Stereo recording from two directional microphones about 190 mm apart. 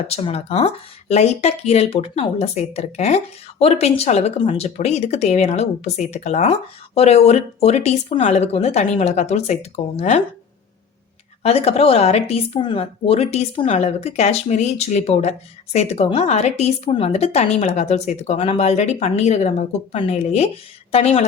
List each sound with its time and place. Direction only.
0.2 s speech: 30° left (ahead or behind)
11.4 s speech: 30° left (ahead or behind)